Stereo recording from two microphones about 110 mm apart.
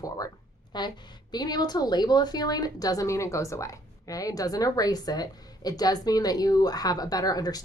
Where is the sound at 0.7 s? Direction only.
40° left (ahead or behind).